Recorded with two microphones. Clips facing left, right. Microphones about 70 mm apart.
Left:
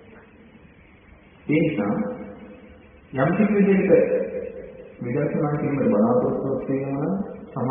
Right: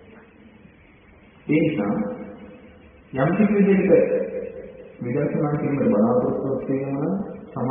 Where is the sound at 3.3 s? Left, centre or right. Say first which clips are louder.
Right 1 dB; centre.